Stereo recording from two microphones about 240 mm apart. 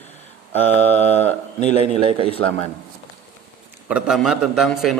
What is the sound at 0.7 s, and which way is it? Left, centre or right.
Speech, centre.